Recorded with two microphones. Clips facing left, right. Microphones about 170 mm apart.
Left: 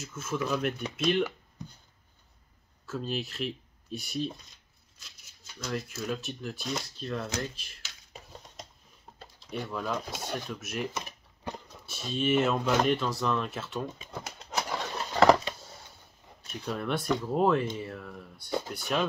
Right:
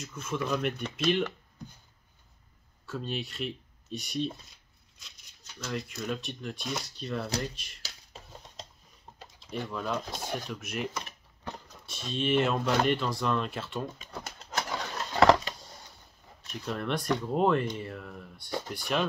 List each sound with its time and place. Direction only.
0.0 s speech: 5° left (ahead or behind)
2.9 s speech: 5° left (ahead or behind)
5.6 s speech: centre (ahead or behind)
7.8 s a sound: 35° right (ahead or behind)
9.6 s speech: 5° left (ahead or behind)
16.5 s speech: centre (ahead or behind)